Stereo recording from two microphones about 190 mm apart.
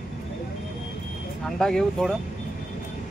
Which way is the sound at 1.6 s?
5° left (ahead or behind).